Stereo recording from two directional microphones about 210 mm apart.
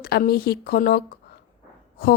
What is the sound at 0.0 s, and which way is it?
A woman's voice, 45° left (ahead or behind).